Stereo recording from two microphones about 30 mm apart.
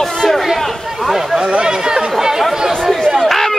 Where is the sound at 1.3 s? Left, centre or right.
Right.